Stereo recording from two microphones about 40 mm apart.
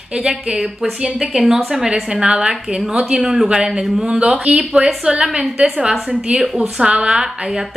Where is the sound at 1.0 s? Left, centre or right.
Centre.